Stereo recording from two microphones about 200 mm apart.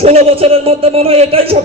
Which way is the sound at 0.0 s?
30° right (ahead or behind).